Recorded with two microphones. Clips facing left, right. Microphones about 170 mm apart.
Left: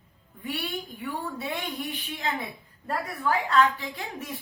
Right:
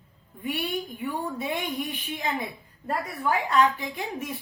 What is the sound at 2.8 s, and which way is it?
A woman's voice, 15° right (ahead or behind).